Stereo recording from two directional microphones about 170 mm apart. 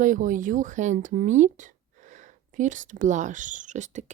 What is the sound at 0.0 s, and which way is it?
Speech, 50° right (ahead or behind).